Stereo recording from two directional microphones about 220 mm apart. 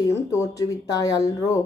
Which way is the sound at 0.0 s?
15° left (ahead or behind).